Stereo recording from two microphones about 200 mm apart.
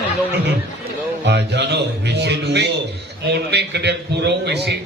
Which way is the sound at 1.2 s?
55° right (ahead or behind).